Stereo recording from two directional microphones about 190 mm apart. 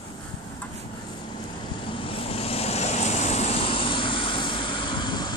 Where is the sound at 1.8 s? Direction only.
30° left (ahead or behind).